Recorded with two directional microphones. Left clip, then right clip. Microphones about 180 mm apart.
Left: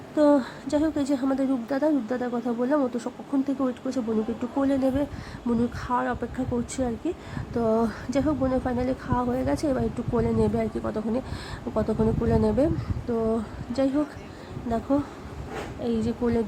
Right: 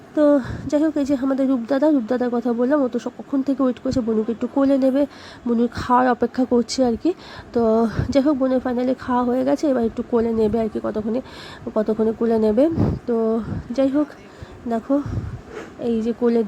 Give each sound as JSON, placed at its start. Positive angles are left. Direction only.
{"t": 0.2, "sound": "a woman's voice", "side_deg": -20}